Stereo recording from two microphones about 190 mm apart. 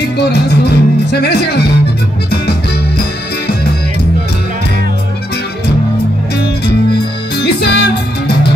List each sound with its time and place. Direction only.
0.2 s speech: 60° left (ahead or behind)
6.9 s music: 60° left (ahead or behind)